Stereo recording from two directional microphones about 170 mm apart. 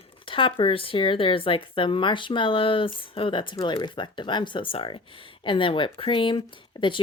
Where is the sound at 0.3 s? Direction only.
30° left (ahead or behind).